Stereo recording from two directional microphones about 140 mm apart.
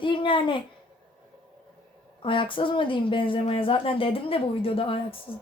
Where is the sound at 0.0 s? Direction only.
35° left (ahead or behind).